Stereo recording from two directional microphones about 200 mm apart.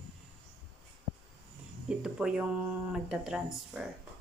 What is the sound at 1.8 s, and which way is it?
Speech, 5° right (ahead or behind).